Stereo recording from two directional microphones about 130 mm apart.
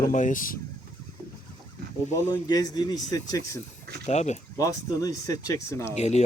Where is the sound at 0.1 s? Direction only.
80° left.